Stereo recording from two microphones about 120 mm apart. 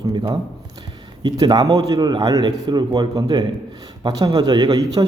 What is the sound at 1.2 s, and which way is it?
A man's voice, 35° right (ahead or behind).